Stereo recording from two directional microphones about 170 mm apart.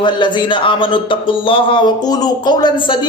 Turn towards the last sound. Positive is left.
turn(degrees=30)  # may be behind; listen again after turning